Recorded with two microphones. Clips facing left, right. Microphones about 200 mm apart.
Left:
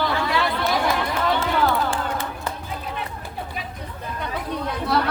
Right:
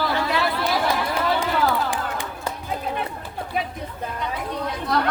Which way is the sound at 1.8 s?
15° right (ahead or behind).